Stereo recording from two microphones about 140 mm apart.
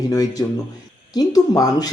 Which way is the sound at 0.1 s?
25° left (ahead or behind).